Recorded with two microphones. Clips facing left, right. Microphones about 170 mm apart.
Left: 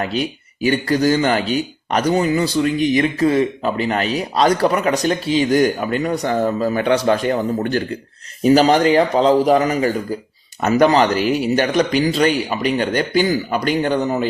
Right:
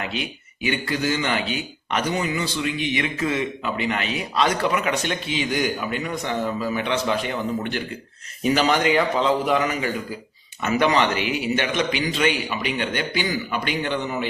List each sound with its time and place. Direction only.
0.0 s speech: 40° left (ahead or behind)